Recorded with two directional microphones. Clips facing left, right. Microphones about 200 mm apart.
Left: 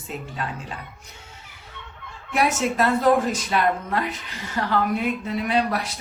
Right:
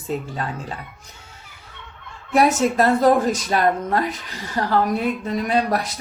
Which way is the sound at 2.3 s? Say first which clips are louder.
Right 5 dB; 40° right (ahead or behind).